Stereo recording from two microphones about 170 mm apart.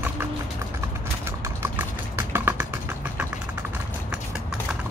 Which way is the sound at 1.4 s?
15° right (ahead or behind).